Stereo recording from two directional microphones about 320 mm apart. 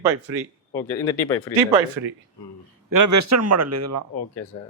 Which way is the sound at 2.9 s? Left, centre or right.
Right.